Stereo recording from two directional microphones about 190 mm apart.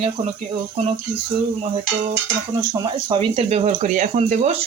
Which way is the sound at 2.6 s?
25° right (ahead or behind).